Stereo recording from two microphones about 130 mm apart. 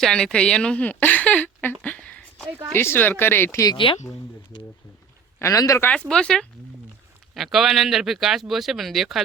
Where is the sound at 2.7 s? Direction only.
15° left (ahead or behind).